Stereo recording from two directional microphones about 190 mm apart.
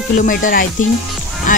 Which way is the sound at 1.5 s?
45° left (ahead or behind).